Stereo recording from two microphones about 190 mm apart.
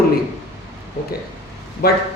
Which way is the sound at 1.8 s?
55° left (ahead or behind).